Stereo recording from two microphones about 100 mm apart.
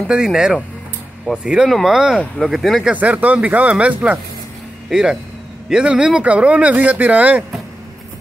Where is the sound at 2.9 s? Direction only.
15° right (ahead or behind).